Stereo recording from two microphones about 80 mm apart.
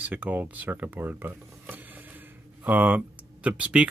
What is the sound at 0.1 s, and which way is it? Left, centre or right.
Speech, right.